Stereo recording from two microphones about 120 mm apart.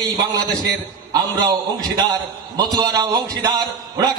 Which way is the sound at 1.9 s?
35° right (ahead or behind).